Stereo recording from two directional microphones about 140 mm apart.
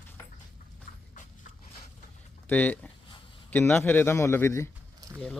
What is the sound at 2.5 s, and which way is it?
Speech, 10° left (ahead or behind).